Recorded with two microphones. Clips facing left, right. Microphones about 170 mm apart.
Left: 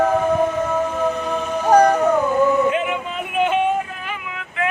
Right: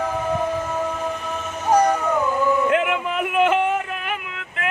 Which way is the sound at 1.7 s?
65° left (ahead or behind).